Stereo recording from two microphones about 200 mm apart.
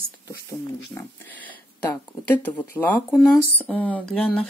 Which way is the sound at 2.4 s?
10° left (ahead or behind).